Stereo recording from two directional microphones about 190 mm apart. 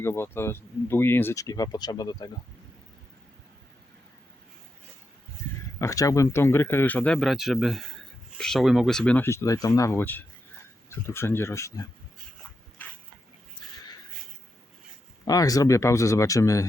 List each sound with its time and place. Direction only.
0.0 s speech: 15° left (ahead or behind)
5.8 s speech: 15° left (ahead or behind)
12.8 s dog: 10° left (ahead or behind)
15.3 s speech: 20° left (ahead or behind)